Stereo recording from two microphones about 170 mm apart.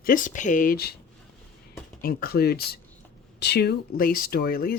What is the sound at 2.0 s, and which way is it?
Speech, 60° left (ahead or behind).